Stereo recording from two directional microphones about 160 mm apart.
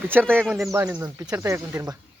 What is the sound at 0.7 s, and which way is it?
Speech, 15° right (ahead or behind).